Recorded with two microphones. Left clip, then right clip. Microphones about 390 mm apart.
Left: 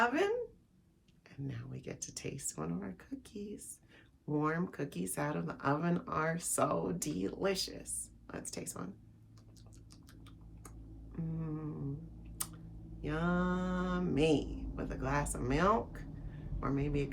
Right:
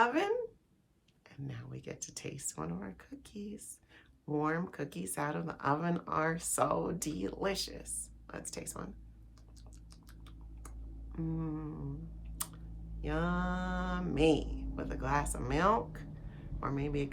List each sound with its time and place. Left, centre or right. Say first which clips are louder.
0.0 s speech: right 1 dB; centre
11.1 s humming: right 4 dB; centre
12.4 s a sound: right 1 dB; centre
13.0 s speech: even; centre